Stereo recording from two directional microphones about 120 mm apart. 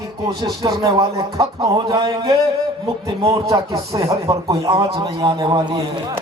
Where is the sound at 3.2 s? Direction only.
30° right (ahead or behind).